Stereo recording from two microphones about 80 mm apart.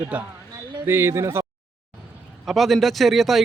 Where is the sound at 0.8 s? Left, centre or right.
Right.